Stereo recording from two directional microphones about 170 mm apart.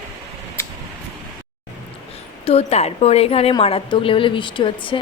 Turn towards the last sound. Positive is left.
turn(degrees=30)  # may be behind; listen again after turning